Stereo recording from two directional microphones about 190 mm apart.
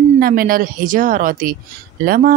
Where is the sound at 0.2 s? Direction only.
50° right (ahead or behind).